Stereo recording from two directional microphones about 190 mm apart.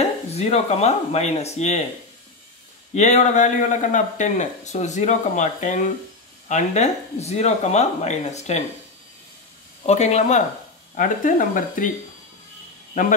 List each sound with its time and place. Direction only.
0.3 s a man's voice: 35° left (ahead or behind)
2.9 s a man's voice: 35° left (ahead or behind)
9.8 s a man's voice: 35° left (ahead or behind)